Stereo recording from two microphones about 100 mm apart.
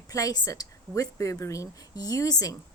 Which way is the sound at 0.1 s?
35° left (ahead or behind).